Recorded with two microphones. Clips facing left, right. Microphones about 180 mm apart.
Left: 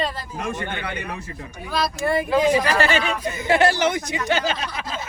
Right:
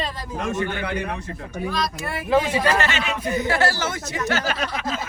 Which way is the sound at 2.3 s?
25° right (ahead or behind).